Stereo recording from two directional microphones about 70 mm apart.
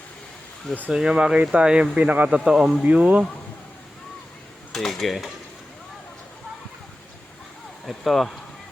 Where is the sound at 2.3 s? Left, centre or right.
Centre.